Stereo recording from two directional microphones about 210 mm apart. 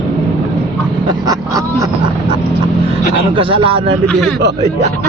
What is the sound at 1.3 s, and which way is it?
Vehicle, 15° right (ahead or behind).